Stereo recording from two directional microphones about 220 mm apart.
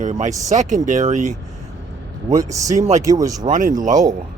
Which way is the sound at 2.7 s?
30° right (ahead or behind).